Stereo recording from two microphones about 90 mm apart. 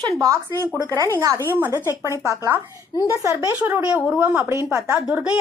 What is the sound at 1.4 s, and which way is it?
Speech, 25° right (ahead or behind).